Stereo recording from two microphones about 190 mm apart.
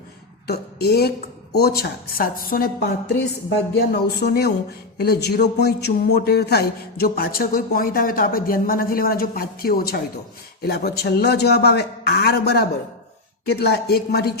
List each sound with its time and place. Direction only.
0.4 s a woman's voice: 55° left (ahead or behind)